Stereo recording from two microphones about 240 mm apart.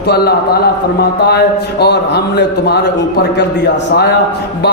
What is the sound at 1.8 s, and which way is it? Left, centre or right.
A man's voice, left.